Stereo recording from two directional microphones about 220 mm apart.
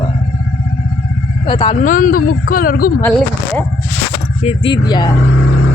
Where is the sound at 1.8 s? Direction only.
40° left (ahead or behind).